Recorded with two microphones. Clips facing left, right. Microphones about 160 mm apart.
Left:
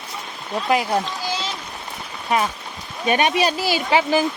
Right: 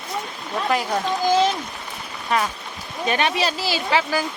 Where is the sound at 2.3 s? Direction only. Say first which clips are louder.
Left 2 dB; 10° left (ahead or behind).